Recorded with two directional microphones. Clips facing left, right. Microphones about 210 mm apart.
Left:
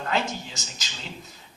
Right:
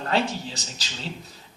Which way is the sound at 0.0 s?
35° right (ahead or behind).